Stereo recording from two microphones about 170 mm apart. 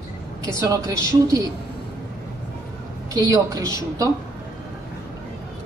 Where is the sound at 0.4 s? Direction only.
20° right (ahead or behind).